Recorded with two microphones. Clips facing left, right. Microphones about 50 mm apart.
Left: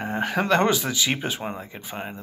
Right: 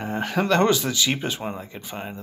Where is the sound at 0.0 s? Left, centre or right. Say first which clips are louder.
Even; centre.